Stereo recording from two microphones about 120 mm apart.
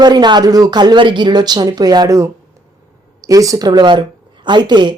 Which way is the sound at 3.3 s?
30° right (ahead or behind).